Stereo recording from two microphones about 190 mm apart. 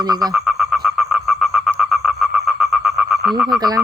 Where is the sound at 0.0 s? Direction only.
20° right (ahead or behind).